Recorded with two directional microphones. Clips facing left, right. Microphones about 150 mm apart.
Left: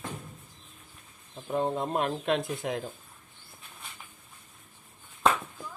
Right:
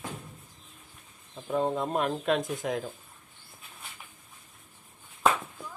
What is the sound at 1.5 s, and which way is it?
Speech, 55° right (ahead or behind).